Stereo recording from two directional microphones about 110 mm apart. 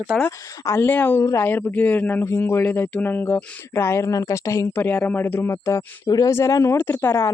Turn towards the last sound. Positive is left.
turn(degrees=25)  # may be behind; listen again after turning